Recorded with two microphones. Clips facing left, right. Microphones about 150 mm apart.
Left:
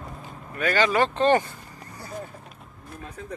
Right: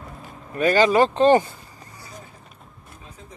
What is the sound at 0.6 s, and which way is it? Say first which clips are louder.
Speech: right 5 dB; 30° right (ahead or behind).